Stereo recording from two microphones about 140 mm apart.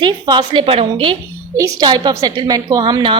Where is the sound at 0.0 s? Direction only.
30° right (ahead or behind).